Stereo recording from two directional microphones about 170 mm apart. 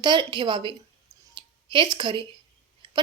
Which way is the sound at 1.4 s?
25° right (ahead or behind).